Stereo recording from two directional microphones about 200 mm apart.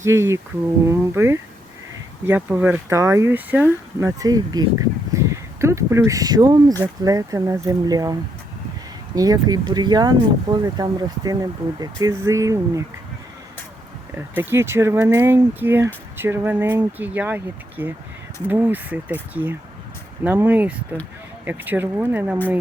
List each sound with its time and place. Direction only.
0.0 s speech: 15° right (ahead or behind)
14.2 s speech: 10° right (ahead or behind)